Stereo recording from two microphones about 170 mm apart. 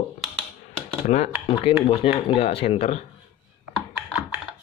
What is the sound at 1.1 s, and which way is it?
Speech, 45° left (ahead or behind).